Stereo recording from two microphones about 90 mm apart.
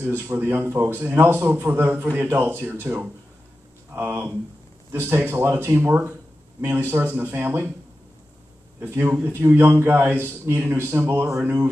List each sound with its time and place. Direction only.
0.0 s a man's voice: 25° right (ahead or behind)
8.7 s a man's voice: 25° right (ahead or behind)